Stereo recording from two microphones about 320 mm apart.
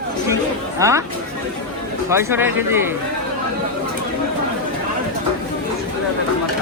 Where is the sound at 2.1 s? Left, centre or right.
Centre.